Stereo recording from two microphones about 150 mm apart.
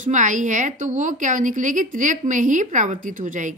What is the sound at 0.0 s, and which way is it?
A woman's voice, 55° right (ahead or behind).